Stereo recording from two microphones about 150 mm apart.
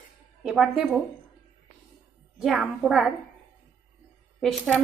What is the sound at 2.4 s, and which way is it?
Speech, 5° right (ahead or behind).